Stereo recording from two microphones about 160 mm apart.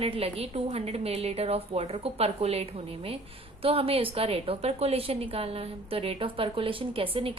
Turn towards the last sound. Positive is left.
turn(degrees=-35)  # may be behind; listen again after turning